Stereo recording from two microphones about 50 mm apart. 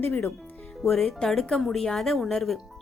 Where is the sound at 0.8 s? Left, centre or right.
Centre.